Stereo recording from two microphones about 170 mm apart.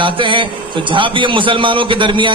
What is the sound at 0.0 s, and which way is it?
A man's voice, 30° right (ahead or behind).